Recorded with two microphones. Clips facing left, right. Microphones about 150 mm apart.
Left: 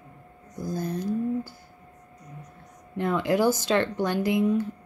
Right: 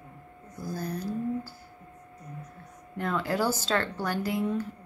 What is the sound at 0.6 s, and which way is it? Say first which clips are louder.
Speech: left 4 dB; 20° left (ahead or behind).